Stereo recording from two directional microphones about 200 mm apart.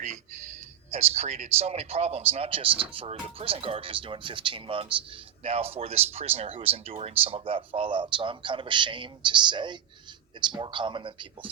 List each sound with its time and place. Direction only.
0.9 s a man's voice: 30° right (ahead or behind)